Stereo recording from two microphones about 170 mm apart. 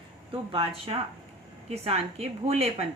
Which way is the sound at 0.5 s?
35° right (ahead or behind).